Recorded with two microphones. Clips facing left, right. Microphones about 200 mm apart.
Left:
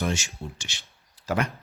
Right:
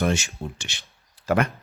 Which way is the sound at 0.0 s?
60° right (ahead or behind).